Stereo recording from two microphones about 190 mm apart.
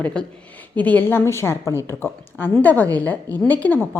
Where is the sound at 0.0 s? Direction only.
5° left (ahead or behind).